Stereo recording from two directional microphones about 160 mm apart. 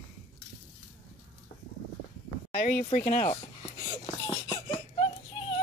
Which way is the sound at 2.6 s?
60° left (ahead or behind).